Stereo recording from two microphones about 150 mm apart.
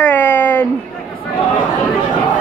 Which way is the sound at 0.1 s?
15° left (ahead or behind).